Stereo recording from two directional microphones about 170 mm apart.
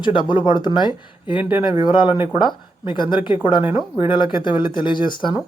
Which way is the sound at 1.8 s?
25° left (ahead or behind).